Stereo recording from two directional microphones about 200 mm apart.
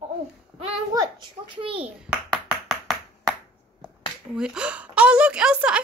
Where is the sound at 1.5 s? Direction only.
25° right (ahead or behind).